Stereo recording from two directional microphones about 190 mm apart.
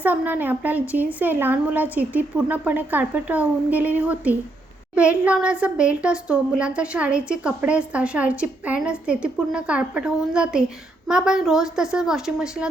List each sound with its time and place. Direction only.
0.0 s a woman's voice: 10° right (ahead or behind)